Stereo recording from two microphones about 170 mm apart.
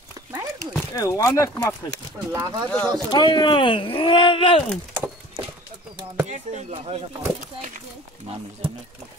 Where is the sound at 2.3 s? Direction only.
15° right (ahead or behind).